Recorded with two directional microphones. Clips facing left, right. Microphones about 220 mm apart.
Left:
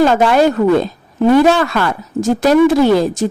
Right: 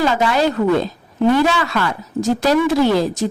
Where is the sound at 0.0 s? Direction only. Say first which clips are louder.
Left 6 dB; 55° left (ahead or behind).